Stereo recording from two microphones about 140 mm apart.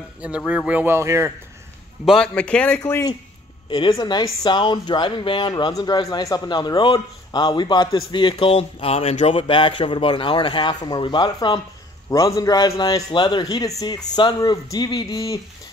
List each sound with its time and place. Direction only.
0.5 s speech: 10° right (ahead or behind)
2.0 s a man's voice: 5° left (ahead or behind)
2.8 s a man's voice: 25° left (ahead or behind)